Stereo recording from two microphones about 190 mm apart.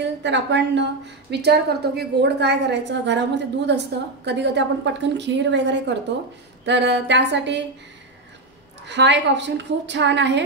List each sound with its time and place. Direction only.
0.0 s a woman's voice: 65° right (ahead or behind)
8.8 s a woman's voice: 65° right (ahead or behind)